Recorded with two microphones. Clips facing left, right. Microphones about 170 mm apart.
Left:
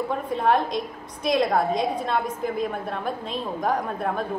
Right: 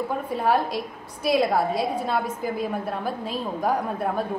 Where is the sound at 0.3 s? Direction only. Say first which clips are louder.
Left 1 dB; 5° right (ahead or behind).